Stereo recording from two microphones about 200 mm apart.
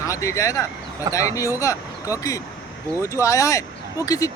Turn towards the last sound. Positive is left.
turn(degrees=15)  # may be behind; listen again after turning